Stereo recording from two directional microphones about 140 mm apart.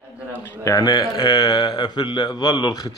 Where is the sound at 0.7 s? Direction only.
25° left (ahead or behind).